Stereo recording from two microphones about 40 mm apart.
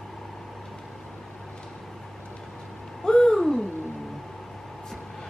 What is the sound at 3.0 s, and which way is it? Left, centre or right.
Hoot, centre.